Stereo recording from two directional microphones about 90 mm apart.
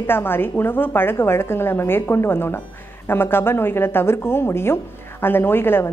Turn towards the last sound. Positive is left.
turn(degrees=25)  # may be behind; listen again after turning